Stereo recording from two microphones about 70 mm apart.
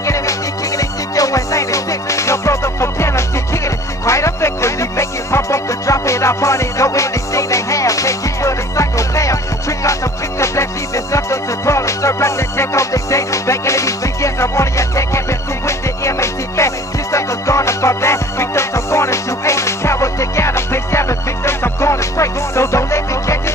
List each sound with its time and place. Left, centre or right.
0.0 s music: left